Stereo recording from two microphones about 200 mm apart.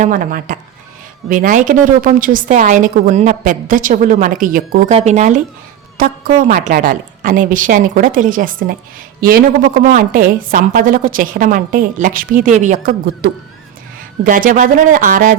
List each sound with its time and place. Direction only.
0.0 s a woman's voice: 45° right (ahead or behind)
4.9 s a woman's voice: 35° right (ahead or behind)